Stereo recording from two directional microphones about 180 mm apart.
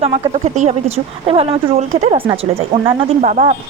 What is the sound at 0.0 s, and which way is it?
Speech, 40° right (ahead or behind).